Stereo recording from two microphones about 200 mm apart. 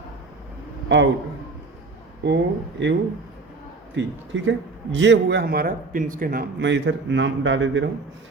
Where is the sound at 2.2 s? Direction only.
60° right (ahead or behind).